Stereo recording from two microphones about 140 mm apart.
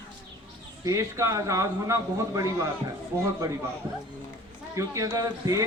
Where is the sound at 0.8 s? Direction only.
20° right (ahead or behind).